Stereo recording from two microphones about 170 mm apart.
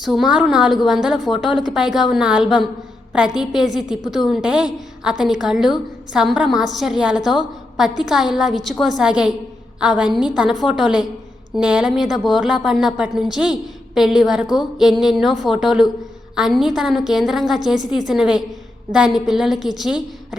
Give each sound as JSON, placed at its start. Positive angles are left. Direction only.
{"t": 0.0, "sound": "a woman's voice", "side_deg": 0}
{"t": 10.3, "sound": "a woman's voice", "side_deg": -5}
{"t": 14.4, "sound": "a sound", "side_deg": 25}
{"t": 14.8, "sound": "a woman's voice", "side_deg": -5}